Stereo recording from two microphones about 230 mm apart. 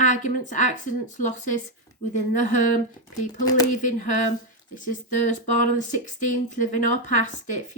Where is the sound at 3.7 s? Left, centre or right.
Left.